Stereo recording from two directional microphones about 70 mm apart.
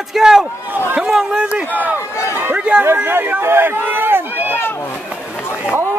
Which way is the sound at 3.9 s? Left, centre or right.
Right.